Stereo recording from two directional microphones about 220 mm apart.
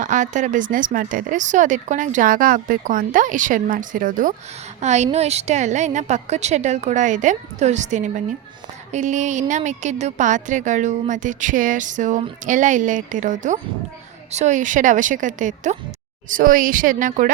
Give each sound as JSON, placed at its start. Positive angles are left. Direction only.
{"t": 0.0, "sound": "speech", "side_deg": -35}